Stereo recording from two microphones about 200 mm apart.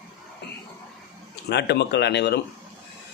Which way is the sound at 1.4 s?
55° left (ahead or behind).